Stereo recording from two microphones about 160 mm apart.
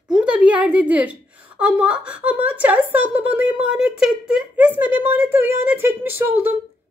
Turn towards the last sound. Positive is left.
turn(degrees=-10)  # may be behind; listen again after turning